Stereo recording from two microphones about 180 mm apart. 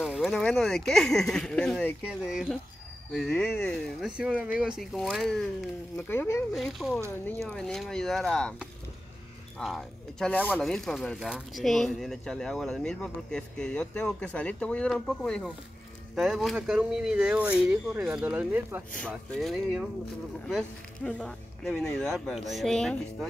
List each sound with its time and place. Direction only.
0.0 s speech: centre (ahead or behind)
2.0 s speech: 5° right (ahead or behind)
5.9 s speech: 15° left (ahead or behind)
6.5 s speech: centre (ahead or behind)
9.6 s speech: centre (ahead or behind)
18.9 s speech: 5° left (ahead or behind)